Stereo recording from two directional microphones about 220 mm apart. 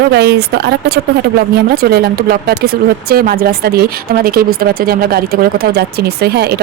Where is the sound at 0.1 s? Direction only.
50° right (ahead or behind).